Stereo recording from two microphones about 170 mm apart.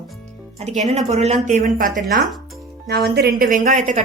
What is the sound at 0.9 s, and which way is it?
Speech, 40° right (ahead or behind).